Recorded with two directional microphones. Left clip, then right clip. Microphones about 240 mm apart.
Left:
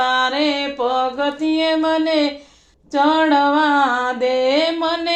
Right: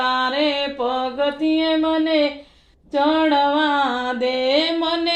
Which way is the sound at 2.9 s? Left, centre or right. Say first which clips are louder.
Left 2 dB; left.